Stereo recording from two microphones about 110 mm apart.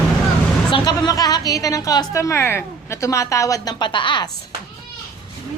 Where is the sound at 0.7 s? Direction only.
35° left (ahead or behind).